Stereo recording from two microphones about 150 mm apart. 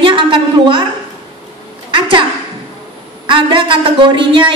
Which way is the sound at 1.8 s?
35° right (ahead or behind).